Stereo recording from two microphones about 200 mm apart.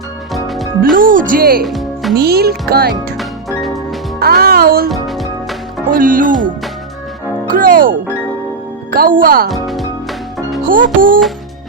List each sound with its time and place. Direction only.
0.3 s music: centre (ahead or behind)
0.9 s a child's voice: 45° right (ahead or behind)
1.6 s music: centre (ahead or behind)
2.1 s a child's voice: 50° right (ahead or behind)
4.2 s speech: 50° right (ahead or behind)
4.9 s music: centre (ahead or behind)
5.9 s a child's voice: 45° right (ahead or behind)
7.5 s speech: 45° right (ahead or behind)
9.5 s music: centre (ahead or behind)
10.7 s a child's voice: 45° right (ahead or behind)